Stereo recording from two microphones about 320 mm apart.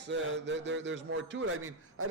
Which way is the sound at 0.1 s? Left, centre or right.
Right.